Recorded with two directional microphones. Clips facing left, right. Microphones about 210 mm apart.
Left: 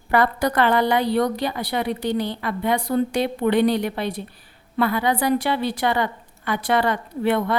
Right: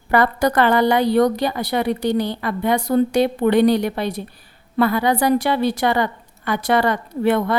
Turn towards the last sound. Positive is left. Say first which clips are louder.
# right 3 dB
turn(degrees=-40)  # may be behind; listen again after turning